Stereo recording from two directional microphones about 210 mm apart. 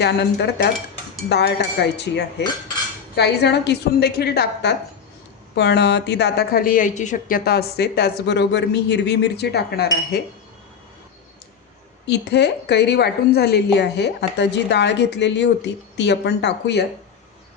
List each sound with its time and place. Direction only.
0.0 s a woman's voice: 50° left (ahead or behind)
12.0 s a woman's voice: 55° left (ahead or behind)